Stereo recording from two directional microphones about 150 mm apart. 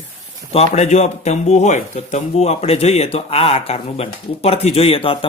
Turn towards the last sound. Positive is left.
turn(degrees=40)  # may be behind; listen again after turning